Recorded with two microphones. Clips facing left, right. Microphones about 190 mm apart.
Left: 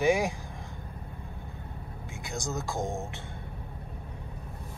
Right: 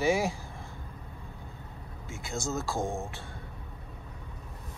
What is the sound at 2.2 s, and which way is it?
Speech, 15° left (ahead or behind).